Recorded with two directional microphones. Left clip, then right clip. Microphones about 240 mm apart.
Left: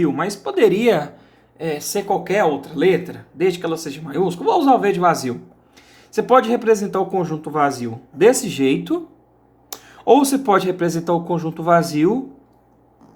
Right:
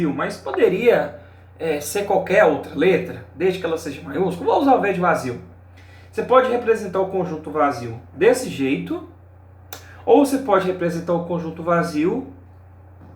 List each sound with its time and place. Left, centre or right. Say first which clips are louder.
0.0 s speech: left 3 dB; left
10.0 s speech: left 1 dB; left